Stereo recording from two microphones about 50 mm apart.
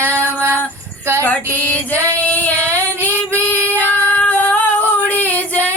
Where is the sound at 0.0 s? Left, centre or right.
Right.